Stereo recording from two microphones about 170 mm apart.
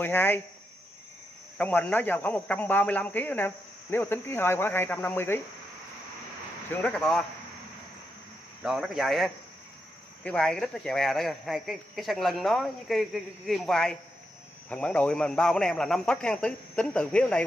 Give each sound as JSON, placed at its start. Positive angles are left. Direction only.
{"t": 0.0, "sound": "speech", "side_deg": 10}
{"t": 1.6, "sound": "speech", "side_deg": 10}
{"t": 6.7, "sound": "speech", "side_deg": 5}
{"t": 8.6, "sound": "speech", "side_deg": 0}